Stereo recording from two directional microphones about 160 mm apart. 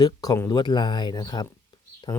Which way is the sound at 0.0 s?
25° left (ahead or behind).